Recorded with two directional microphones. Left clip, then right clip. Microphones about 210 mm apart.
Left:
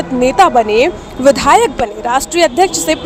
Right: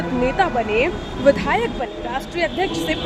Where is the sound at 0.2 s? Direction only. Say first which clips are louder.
Left 11 dB; 35° left (ahead or behind).